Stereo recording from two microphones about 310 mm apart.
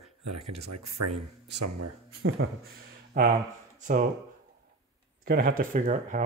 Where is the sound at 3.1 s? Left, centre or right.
Right.